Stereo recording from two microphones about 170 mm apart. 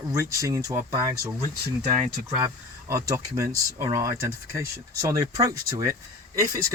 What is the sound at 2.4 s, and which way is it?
Speech, 20° right (ahead or behind).